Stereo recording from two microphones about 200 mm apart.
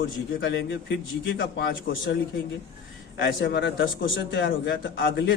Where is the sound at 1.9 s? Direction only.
45° left (ahead or behind).